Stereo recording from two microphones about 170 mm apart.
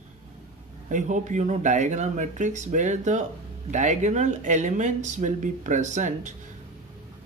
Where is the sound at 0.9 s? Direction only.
45° right (ahead or behind).